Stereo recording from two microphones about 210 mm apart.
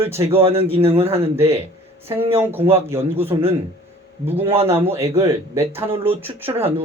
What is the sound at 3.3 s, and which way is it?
Speech, 20° right (ahead or behind).